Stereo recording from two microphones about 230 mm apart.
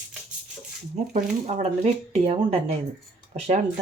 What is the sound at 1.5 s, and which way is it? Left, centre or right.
Speech, right.